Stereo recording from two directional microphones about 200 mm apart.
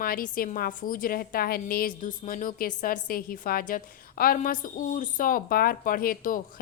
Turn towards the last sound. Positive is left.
turn(degrees=45)  # may be behind; listen again after turning